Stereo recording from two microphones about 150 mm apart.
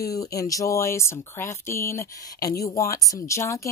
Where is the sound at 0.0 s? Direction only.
20° left (ahead or behind).